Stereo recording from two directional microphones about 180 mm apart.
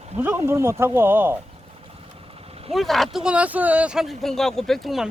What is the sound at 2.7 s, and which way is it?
Speech, centre (ahead or behind).